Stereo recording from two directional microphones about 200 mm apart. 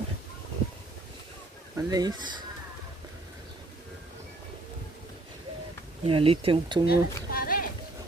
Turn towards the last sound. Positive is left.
turn(degrees=50)  # may be behind; listen again after turning